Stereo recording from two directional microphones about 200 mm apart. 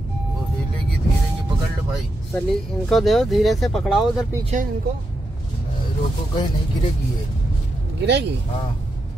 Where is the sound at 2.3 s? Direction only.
5° left (ahead or behind).